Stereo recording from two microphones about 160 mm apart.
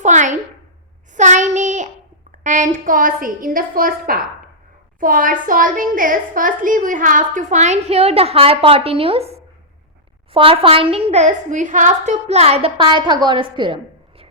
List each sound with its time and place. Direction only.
0.0 s a sound: 50° right (ahead or behind)
1.1 s child singing: 50° right (ahead or behind)
2.4 s a woman's voice: 50° right (ahead or behind); by 13.7 s 30° right (ahead or behind)